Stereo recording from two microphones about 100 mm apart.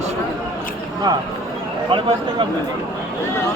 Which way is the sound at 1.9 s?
55° right (ahead or behind).